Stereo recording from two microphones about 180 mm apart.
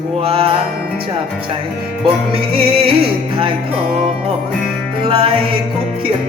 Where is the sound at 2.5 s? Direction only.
30° right (ahead or behind).